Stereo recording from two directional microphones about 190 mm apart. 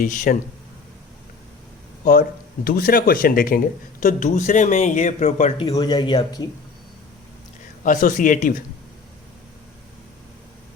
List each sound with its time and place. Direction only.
0.0 s speech: 45° left (ahead or behind)
2.6 s speech: 50° left (ahead or behind)
5.6 s speech: 20° left (ahead or behind)
7.9 s speech: 45° left (ahead or behind)